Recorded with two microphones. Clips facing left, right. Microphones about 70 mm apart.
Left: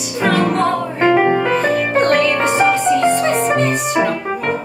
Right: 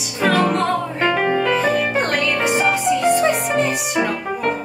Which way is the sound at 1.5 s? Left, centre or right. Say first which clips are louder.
Left 2 dB; centre.